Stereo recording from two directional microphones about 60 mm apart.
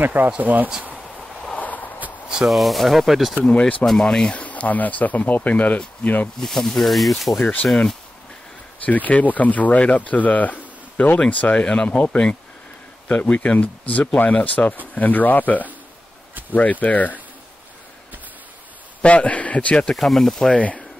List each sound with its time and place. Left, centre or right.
0.0 s speech: right
0.9 s a sound: centre
1.6 s a sound: left
2.2 s rub: centre
2.5 s speech: centre
3.4 s speech: left
3.8 s speech: centre
4.4 s speech: left
6.4 s speech: centre
8.8 s speech: left
16.8 s speech: left
19.0 s speech: left; by 20.5 s centre
20.5 s speech: left